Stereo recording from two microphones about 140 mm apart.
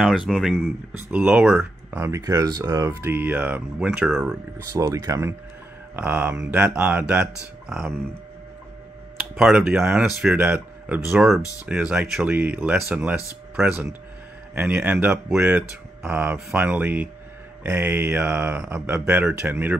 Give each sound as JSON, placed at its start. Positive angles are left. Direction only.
{"t": 0.0, "sound": "speech", "side_deg": 0}
{"t": 0.9, "sound": "speech", "side_deg": -15}
{"t": 1.9, "sound": "speech", "side_deg": -20}
{"t": 4.7, "sound": "speech", "side_deg": -25}
{"t": 5.9, "sound": "speech", "side_deg": -10}
{"t": 9.3, "sound": "speech", "side_deg": -5}